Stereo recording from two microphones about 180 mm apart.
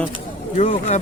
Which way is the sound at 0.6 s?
40° left (ahead or behind).